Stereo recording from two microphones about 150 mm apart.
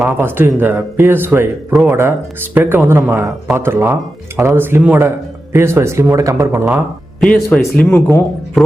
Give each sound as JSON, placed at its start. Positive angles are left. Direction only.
{"t": 0.0, "sound": "speech", "side_deg": -15}
{"t": 7.2, "sound": "speech", "side_deg": 5}